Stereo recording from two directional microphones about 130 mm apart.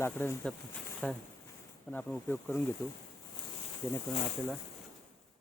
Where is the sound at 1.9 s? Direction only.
15° left (ahead or behind).